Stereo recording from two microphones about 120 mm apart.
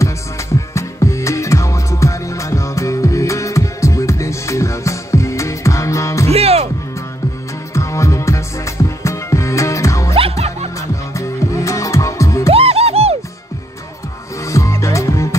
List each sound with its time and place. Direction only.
0.7 s music: 25° left (ahead or behind)
6.3 s music: 60° right (ahead or behind)
7.7 s music: 25° left (ahead or behind)
10.1 s music: 55° right (ahead or behind)
11.1 s music: 25° left (ahead or behind)
12.4 s music: 55° right (ahead or behind)
14.4 s music: 25° left (ahead or behind)